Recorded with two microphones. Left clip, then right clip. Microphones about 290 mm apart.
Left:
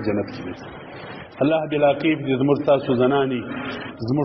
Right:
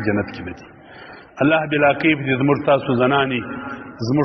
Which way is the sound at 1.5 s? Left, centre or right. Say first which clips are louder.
Right 2 dB; right.